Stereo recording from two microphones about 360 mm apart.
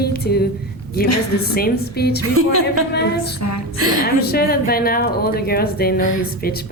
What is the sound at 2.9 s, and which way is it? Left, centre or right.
A woman's voice, left.